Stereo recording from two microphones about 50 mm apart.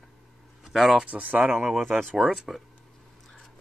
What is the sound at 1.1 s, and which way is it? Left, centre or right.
Speech, right.